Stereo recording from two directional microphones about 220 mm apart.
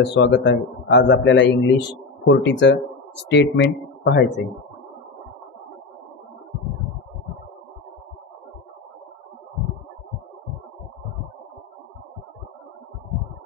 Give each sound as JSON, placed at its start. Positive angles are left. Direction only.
{"t": 0.0, "sound": "a man's voice", "side_deg": 50}